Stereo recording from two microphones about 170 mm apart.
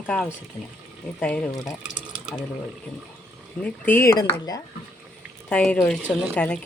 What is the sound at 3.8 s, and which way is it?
Speech, 15° left (ahead or behind).